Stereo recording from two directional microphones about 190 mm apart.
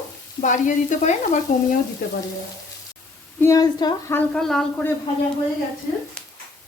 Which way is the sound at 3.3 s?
15° left (ahead or behind).